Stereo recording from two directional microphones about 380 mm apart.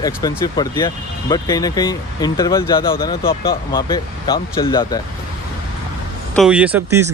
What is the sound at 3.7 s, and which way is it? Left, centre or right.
Speech, centre.